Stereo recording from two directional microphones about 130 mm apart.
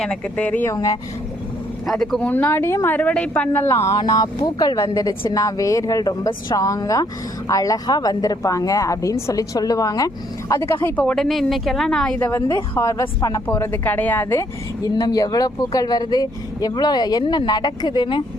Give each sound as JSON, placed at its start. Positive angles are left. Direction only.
{"t": 0.0, "sound": "a woman's voice", "side_deg": 10}
{"t": 0.7, "sound": "a woman's voice", "side_deg": 25}
{"t": 1.9, "sound": "a woman's voice", "side_deg": 5}
{"t": 2.3, "sound": "a woman's voice", "side_deg": 15}
{"t": 3.9, "sound": "a woman's voice", "side_deg": 30}
{"t": 12.7, "sound": "a woman's voice", "side_deg": 25}
{"t": 14.9, "sound": "speech", "side_deg": 30}